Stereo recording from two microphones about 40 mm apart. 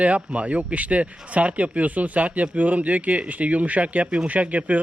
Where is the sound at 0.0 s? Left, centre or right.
Right.